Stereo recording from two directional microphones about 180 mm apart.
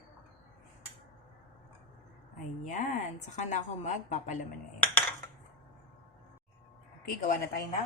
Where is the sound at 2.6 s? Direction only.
40° left (ahead or behind).